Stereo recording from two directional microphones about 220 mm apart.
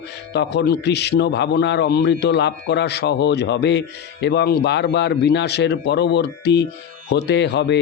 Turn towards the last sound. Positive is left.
turn(degrees=50)  # may be behind; listen again after turning